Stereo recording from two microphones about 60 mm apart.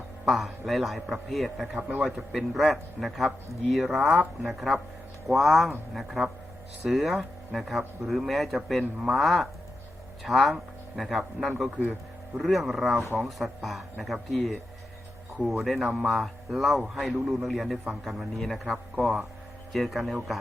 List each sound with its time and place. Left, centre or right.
0.3 s a man's voice: centre
1.6 s a man's voice: centre
4.0 s speech: right
4.4 s a man's voice: centre